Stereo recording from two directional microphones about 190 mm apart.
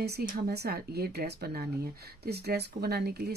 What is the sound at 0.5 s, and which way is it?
Speech, 55° right (ahead or behind).